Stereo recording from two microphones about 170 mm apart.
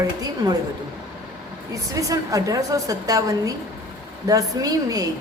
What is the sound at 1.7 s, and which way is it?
A woman's voice, 20° right (ahead or behind).